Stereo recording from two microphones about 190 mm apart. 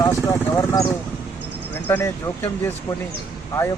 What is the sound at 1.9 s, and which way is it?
Speech, 10° left (ahead or behind).